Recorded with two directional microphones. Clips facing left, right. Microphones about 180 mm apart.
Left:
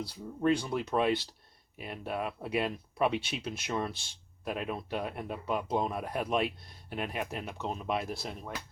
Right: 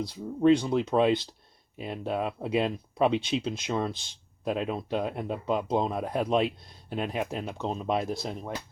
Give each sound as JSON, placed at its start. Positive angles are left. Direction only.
{"t": 0.0, "sound": "speech", "side_deg": -20}